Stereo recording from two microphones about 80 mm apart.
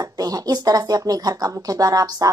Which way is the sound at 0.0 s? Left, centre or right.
Right.